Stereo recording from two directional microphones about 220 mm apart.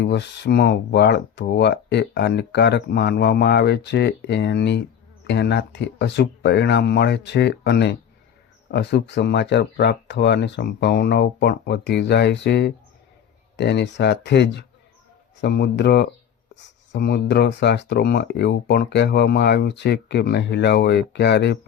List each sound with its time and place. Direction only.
0.0 s speech: 50° left (ahead or behind)